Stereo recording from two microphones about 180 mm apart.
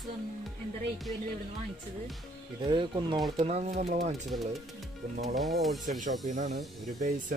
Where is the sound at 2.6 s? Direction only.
25° right (ahead or behind).